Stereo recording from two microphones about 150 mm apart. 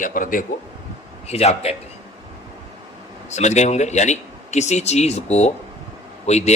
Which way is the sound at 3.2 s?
50° left (ahead or behind).